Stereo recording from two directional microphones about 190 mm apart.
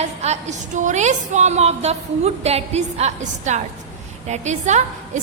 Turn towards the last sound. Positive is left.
turn(degrees=-40)  # may be behind; listen again after turning